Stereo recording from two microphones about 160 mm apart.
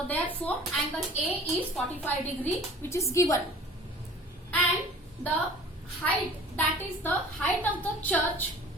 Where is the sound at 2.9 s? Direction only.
20° left (ahead or behind).